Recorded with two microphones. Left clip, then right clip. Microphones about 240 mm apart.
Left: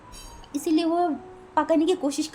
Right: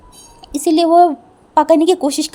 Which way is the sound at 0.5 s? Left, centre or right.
Right.